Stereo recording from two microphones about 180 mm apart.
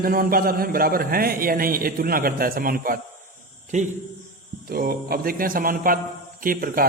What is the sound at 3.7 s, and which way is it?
Speech, 40° right (ahead or behind).